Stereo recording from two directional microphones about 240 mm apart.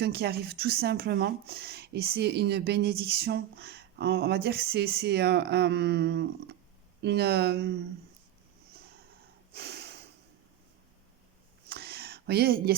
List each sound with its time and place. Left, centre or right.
0.0 s speech: right
9.5 s snort: right
11.7 s a sound: right